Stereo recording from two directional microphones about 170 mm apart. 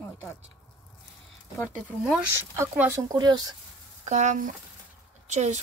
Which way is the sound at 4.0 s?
45° right (ahead or behind).